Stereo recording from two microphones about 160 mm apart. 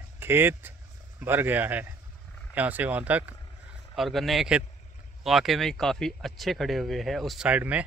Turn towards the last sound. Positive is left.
turn(degrees=-10)  # may be behind; listen again after turning